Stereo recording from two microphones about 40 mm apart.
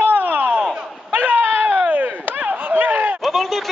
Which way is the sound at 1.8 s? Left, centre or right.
Right.